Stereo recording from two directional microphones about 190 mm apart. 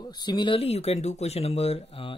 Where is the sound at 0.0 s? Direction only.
20° left (ahead or behind).